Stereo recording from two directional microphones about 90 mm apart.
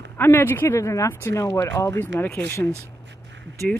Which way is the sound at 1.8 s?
25° left (ahead or behind).